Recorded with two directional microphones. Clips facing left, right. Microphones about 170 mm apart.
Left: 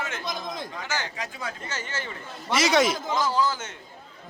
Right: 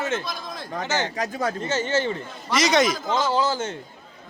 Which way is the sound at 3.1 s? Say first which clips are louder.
Right 3 dB; 25° right (ahead or behind).